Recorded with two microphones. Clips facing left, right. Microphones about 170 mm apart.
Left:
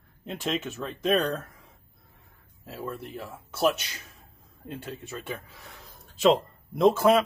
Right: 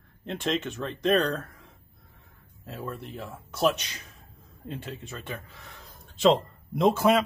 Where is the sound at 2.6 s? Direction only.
Centre (ahead or behind).